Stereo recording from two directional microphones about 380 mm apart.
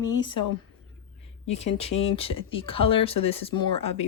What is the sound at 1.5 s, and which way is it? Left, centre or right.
Speech, centre.